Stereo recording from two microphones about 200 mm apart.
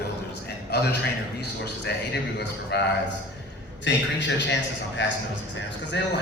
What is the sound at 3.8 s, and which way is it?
A man's voice, 65° left (ahead or behind).